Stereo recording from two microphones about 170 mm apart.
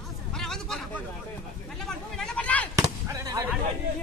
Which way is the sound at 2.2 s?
5° left (ahead or behind).